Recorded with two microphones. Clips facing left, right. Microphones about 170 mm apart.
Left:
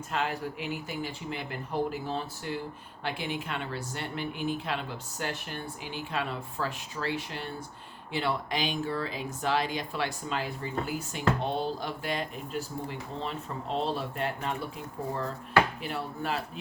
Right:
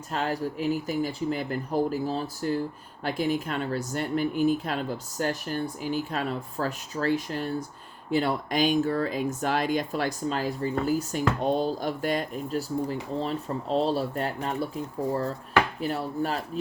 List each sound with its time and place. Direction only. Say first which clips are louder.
0.1 s speech: right 4 dB; 40° right (ahead or behind)
15.8 s speech: right 6 dB; 40° right (ahead or behind)